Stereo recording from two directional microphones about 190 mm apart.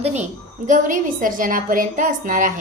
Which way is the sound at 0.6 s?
45° right (ahead or behind).